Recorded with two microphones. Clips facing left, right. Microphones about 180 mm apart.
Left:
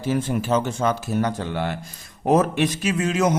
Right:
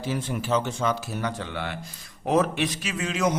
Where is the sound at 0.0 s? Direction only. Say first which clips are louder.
Left 6 dB; 50° left (ahead or behind).